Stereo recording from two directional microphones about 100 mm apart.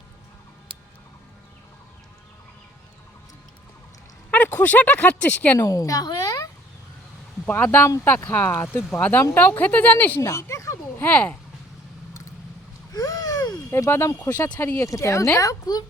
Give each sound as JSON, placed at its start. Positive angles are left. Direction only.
{"t": 4.3, "sound": "speech", "side_deg": 20}
{"t": 5.5, "sound": "a woman's voice", "side_deg": 35}
{"t": 7.4, "sound": "speech", "side_deg": 15}
{"t": 10.2, "sound": "a sound", "side_deg": 30}
{"t": 11.0, "sound": "speech", "side_deg": 15}
{"t": 12.9, "sound": "a sound", "side_deg": 35}
{"t": 13.7, "sound": "speech", "side_deg": 25}
{"t": 14.8, "sound": "speech", "side_deg": 30}